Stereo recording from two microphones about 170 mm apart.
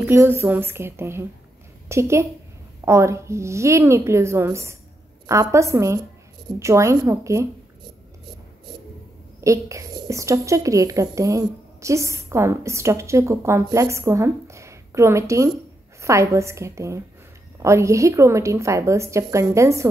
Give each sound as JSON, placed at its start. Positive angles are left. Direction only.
{"t": 0.0, "sound": "a woman's voice", "side_deg": -15}
{"t": 9.4, "sound": "a woman's voice", "side_deg": -20}